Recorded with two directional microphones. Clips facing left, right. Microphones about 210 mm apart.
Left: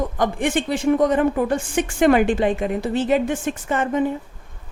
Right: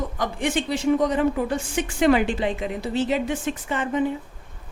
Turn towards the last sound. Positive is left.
turn(degrees=45)  # may be behind; listen again after turning